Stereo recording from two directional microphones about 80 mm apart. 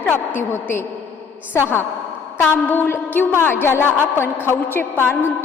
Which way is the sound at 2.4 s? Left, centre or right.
Left.